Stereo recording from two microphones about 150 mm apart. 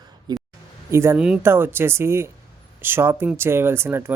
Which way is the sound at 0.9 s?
20° right (ahead or behind).